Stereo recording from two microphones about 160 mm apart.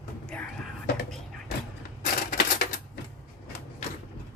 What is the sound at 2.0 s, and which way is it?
Typewriter, 60° left (ahead or behind).